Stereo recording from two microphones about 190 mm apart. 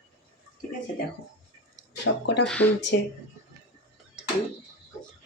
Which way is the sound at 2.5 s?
10° left (ahead or behind).